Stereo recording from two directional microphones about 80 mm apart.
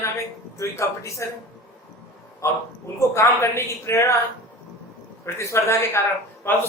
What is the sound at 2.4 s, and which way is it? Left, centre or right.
Speech, left.